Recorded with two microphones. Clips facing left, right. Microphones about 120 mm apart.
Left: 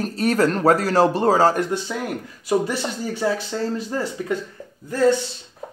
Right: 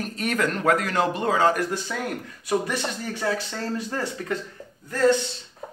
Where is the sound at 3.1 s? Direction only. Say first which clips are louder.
Left 5 dB; 25° left (ahead or behind).